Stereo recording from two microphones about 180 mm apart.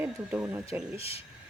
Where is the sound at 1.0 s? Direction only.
35° left (ahead or behind).